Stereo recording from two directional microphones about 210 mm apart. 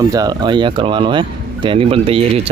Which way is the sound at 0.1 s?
20° right (ahead or behind).